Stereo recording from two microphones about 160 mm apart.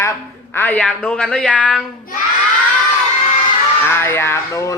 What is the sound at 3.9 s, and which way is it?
Speech, 15° left (ahead or behind).